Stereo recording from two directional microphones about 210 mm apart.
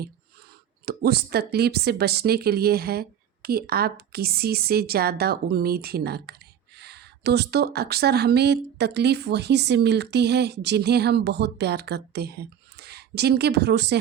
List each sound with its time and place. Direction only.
0.9 s a woman's voice: 50° right (ahead or behind)